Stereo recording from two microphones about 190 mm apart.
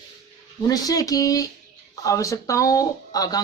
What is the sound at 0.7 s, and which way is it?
Speech, 20° left (ahead or behind).